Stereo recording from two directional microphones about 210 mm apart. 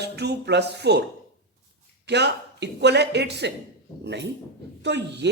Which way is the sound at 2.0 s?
55° right (ahead or behind).